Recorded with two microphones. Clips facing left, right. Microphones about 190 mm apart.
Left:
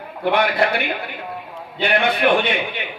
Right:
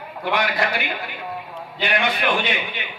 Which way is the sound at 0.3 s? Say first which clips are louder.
Left 4 dB; 60° left (ahead or behind).